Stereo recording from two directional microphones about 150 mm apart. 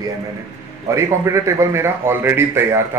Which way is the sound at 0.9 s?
20° right (ahead or behind).